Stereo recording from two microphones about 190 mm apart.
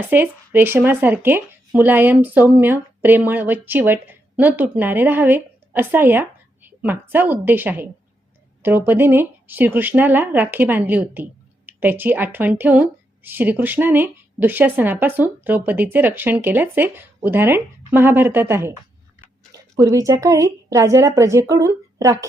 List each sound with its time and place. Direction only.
0.1 s a woman's voice: 10° right (ahead or behind)